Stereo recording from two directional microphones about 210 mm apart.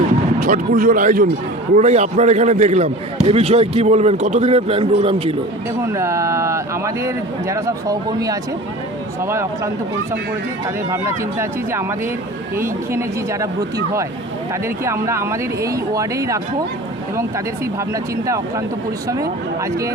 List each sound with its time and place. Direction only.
0.3 s a man's voice: 40° right (ahead or behind)
5.8 s speech: 15° right (ahead or behind)
10.9 s speech: 15° right (ahead or behind)
14.8 s speech: 15° right (ahead or behind)
19.0 s speech: 15° right (ahead or behind)